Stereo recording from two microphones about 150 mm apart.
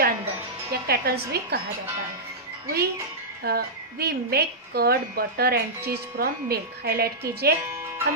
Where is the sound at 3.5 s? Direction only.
90° right.